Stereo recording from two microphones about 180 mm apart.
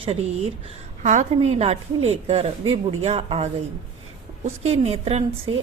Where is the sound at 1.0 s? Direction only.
40° right (ahead or behind).